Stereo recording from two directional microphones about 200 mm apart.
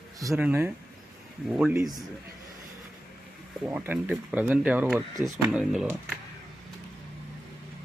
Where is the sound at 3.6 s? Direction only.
10° right (ahead or behind).